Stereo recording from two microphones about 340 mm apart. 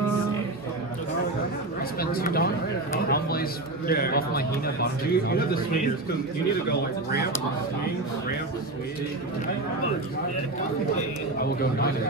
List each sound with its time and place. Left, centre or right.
2.0 s a sound: left
6.7 s a man's voice: left
11.3 s a man's voice: left